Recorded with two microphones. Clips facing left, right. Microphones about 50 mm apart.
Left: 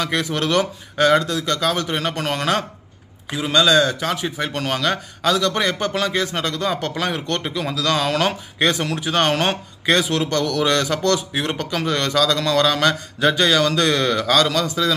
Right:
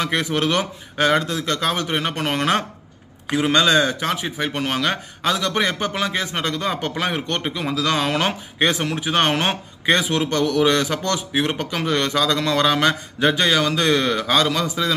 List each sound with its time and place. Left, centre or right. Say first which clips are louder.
0.0 s speech: right 1 dB; right